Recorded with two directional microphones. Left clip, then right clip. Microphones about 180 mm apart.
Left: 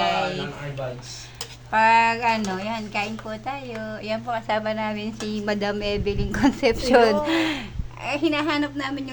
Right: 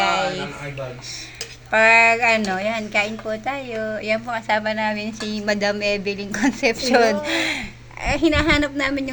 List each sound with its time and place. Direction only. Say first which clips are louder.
0.0 s mantra: right 3 dB; 20° right (ahead or behind)
1.7 s a woman's voice: right 4 dB; 15° right (ahead or behind)
4.3 s speech: right 3 dB; 10° left (ahead or behind)
8.0 s a woman's voice: right 5 dB; 20° right (ahead or behind)